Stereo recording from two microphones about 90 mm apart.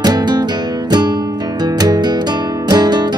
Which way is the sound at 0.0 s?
50° right (ahead or behind).